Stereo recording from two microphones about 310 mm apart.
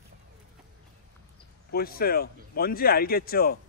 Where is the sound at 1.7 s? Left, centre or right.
Left.